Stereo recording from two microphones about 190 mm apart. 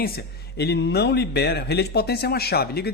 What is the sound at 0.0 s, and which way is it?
A man's voice, 55° left (ahead or behind).